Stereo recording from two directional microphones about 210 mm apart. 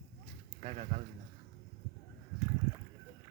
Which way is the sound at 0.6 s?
30° right (ahead or behind).